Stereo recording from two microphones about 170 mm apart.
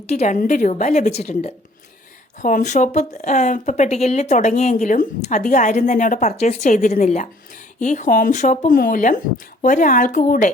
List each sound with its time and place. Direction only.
0.1 s a woman's voice: 40° left (ahead or behind)
0.3 s speech: 50° left (ahead or behind)